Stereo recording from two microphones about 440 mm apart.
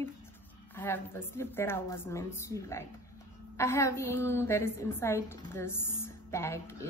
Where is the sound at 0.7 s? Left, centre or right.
Centre.